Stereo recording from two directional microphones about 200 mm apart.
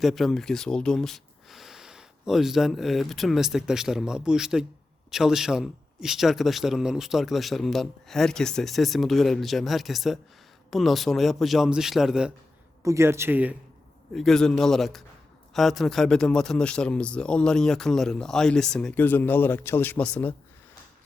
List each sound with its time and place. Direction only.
0.0 s speech: centre (ahead or behind)
12.8 s speech: 15° right (ahead or behind)
14.1 s speech: centre (ahead or behind)